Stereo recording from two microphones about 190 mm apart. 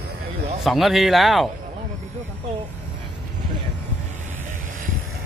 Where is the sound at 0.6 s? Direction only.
Centre (ahead or behind).